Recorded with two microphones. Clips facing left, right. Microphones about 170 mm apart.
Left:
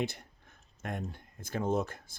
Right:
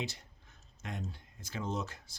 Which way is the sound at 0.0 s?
55° left (ahead or behind).